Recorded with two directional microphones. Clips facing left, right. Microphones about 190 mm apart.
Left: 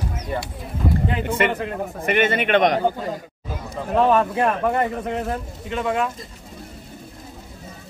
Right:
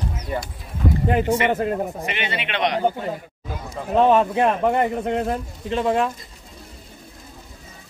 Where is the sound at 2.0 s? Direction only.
50° left (ahead or behind).